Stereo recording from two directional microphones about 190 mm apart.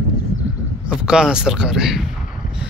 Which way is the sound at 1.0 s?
5° right (ahead or behind).